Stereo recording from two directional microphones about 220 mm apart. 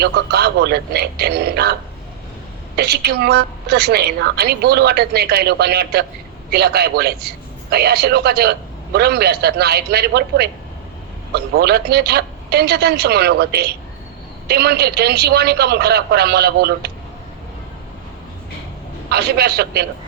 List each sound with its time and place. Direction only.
0.0 s a woman's voice: 45° right (ahead or behind)
2.7 s a woman's voice: 45° right (ahead or behind)
19.1 s a woman's voice: 45° right (ahead or behind)